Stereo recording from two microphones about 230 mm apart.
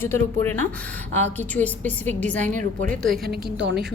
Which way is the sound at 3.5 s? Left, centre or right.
Right.